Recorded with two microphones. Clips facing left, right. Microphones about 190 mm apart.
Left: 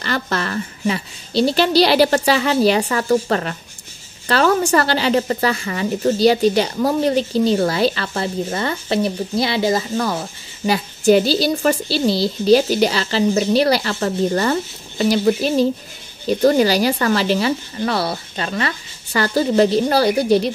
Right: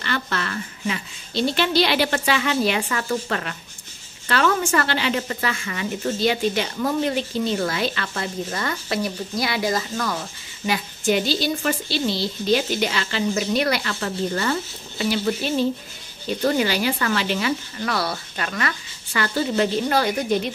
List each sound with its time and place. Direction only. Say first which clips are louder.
0.0 s a woman's voice: left 4 dB; 40° left (ahead or behind)